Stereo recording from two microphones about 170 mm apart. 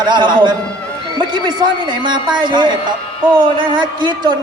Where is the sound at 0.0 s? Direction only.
25° right (ahead or behind).